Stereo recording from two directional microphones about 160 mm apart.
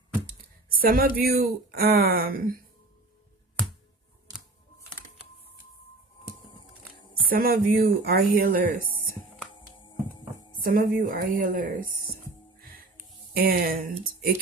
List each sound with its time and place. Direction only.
0.8 s speech: 70° right (ahead or behind)
7.3 s speech: 65° right (ahead or behind)
8.8 s music: 65° left (ahead or behind)
9.8 s music: 30° left (ahead or behind)
10.6 s a woman's voice: 60° right (ahead or behind)
13.3 s speech: 70° right (ahead or behind)